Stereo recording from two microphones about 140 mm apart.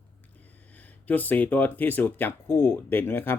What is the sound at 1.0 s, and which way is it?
Speech, 10° left (ahead or behind).